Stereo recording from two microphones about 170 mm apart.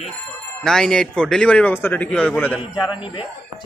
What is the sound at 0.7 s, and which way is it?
Bell, 5° left (ahead or behind).